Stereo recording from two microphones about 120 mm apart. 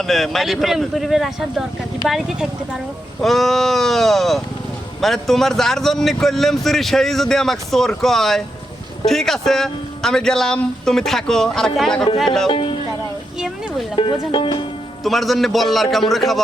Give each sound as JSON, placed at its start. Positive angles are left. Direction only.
{"t": 0.0, "sound": "speech", "side_deg": 0}
{"t": 12.5, "sound": "speech", "side_deg": 50}
{"t": 13.9, "sound": "speech", "side_deg": 45}
{"t": 15.0, "sound": "speech", "side_deg": 0}